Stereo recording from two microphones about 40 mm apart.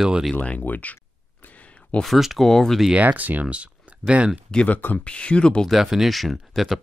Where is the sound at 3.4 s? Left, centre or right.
Right.